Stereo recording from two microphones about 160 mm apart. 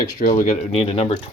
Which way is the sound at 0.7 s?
40° left (ahead or behind).